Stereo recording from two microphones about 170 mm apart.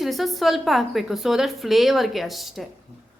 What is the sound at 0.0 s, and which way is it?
A woman's voice, centre (ahead or behind).